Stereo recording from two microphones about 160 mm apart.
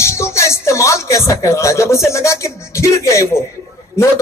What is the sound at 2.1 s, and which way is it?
Speech, 20° left (ahead or behind).